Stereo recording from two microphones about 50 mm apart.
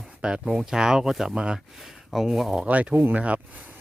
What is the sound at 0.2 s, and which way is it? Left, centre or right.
Speech, centre.